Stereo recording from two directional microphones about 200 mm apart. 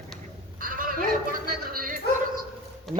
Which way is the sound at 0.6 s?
45° right (ahead or behind).